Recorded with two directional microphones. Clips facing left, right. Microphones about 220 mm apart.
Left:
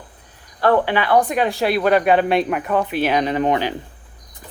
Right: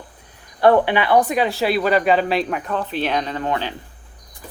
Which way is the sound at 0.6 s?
15° right (ahead or behind).